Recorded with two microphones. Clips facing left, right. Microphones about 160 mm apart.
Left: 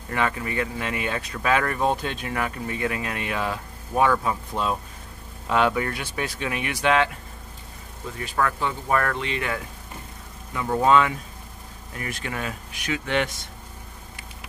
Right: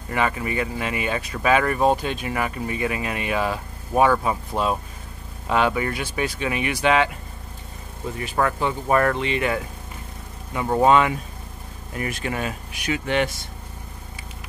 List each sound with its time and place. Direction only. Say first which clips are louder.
0.1 s speech: right 2 dB; 10° right (ahead or behind)
8.4 s speech: right 2 dB; 20° right (ahead or behind)
12.0 s speech: right 4 dB; 10° right (ahead or behind)